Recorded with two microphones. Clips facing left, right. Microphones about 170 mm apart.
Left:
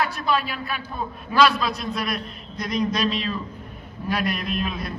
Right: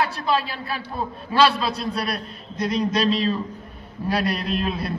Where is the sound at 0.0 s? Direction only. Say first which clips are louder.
Right 1 dB; 35° right (ahead or behind).